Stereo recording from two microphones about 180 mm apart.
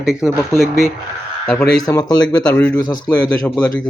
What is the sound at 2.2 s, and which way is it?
Speech, 10° left (ahead or behind).